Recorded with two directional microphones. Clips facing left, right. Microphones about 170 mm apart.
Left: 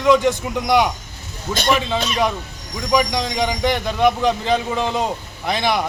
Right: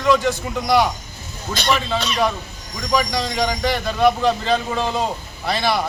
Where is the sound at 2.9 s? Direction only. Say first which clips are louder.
Left 2 dB; 15° left (ahead or behind).